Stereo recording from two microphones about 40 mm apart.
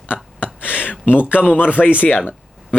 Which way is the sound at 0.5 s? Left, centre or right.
Left.